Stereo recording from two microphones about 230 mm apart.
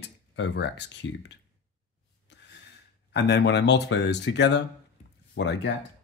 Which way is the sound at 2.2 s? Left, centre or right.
Left.